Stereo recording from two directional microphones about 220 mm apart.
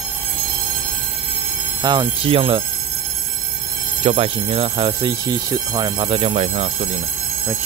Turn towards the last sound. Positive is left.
turn(degrees=-30)  # may be behind; listen again after turning